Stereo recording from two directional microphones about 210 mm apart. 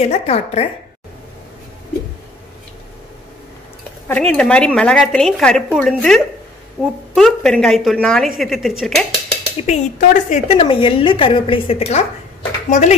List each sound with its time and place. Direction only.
0.0 s a woman's voice: 30° left (ahead or behind)
4.1 s a woman's voice: 5° left (ahead or behind)
9.7 s a woman's voice: 35° left (ahead or behind)